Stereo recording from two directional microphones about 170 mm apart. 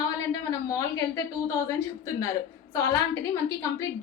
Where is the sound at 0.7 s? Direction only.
20° left (ahead or behind).